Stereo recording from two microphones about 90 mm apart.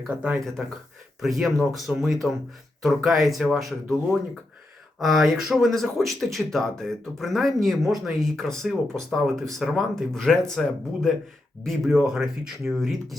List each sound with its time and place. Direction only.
0.1 s speech: 15° right (ahead or behind)
0.6 s speech: 5° right (ahead or behind)
11.6 s speech: 5° right (ahead or behind)